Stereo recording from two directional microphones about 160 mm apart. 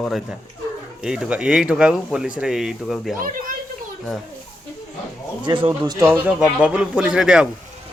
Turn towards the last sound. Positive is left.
turn(degrees=-5)  # may be behind; listen again after turning